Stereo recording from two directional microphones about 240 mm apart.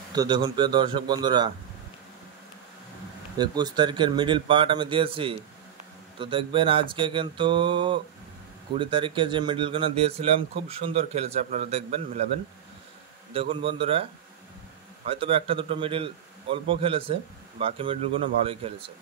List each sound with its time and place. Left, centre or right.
0.1 s a man's voice: centre
3.3 s a man's voice: centre
13.3 s a man's voice: right
15.0 s a man's voice: right